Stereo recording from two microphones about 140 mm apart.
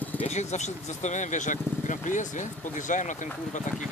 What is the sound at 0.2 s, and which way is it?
Speech, 55° left (ahead or behind).